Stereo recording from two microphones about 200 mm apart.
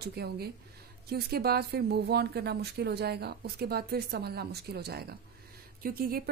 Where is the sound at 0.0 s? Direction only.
55° right (ahead or behind).